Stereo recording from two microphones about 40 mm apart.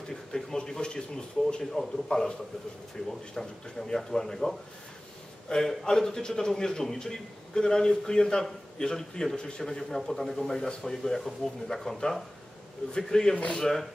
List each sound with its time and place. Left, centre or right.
0.1 s a man's voice: centre